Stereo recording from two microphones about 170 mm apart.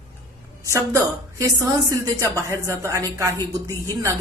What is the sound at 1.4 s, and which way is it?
A woman's voice, 20° right (ahead or behind).